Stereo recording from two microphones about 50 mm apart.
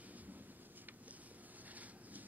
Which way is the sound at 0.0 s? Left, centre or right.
Right.